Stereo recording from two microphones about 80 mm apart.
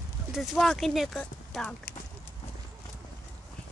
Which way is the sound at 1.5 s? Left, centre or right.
Centre.